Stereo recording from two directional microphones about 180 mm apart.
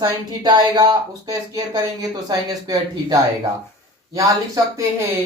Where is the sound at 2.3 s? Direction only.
20° right (ahead or behind).